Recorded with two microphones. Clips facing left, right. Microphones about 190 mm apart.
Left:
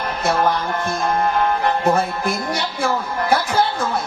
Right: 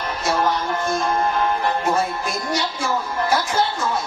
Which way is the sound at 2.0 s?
60° left (ahead or behind).